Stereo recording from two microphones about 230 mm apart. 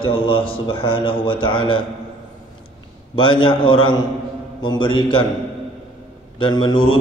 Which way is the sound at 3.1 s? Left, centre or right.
Left.